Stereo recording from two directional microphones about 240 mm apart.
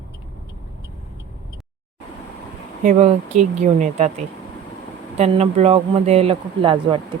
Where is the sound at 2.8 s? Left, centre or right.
Right.